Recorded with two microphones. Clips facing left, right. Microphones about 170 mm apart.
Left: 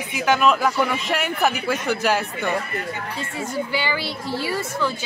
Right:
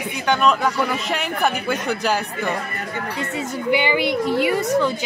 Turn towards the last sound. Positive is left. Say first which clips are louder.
# right 6 dB
turn(degrees=-20)  # may be behind; listen again after turning